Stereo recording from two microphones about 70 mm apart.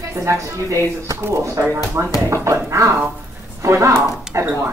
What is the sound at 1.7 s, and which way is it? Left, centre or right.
Speech, right.